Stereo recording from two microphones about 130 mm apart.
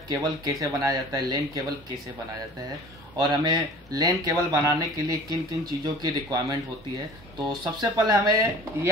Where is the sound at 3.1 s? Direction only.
30° right (ahead or behind).